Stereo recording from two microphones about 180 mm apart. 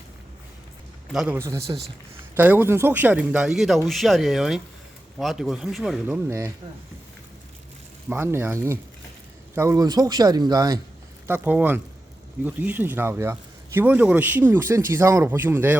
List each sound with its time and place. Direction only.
1.1 s speech: 5° right (ahead or behind)
1.4 s speech: 15° right (ahead or behind)
6.2 s speech: 15° right (ahead or behind)
8.1 s speech: 15° right (ahead or behind)